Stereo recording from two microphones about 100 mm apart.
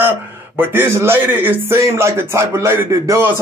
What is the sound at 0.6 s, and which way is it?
A man's voice, 25° right (ahead or behind).